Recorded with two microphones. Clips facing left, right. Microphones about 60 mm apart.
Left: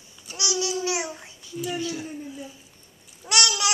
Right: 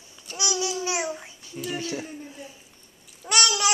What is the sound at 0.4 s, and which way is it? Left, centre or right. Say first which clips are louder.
Babbling: left 1 dB; centre.